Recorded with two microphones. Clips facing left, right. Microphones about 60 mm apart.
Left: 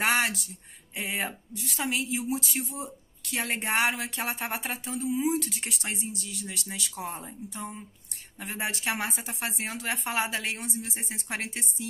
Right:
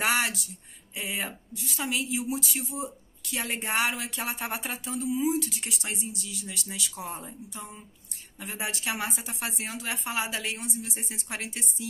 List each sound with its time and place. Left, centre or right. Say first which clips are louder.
0.0 s a woman's voice: left 1 dB; left